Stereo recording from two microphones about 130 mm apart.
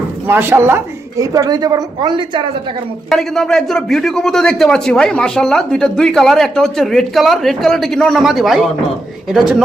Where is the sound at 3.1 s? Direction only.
5° left (ahead or behind).